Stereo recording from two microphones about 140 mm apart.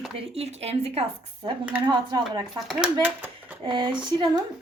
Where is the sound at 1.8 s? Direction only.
30° right (ahead or behind).